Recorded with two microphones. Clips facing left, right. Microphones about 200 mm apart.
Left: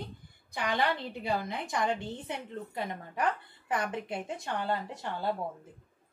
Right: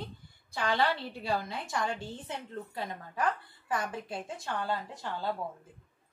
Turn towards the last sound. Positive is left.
turn(degrees=20)  # may be behind; listen again after turning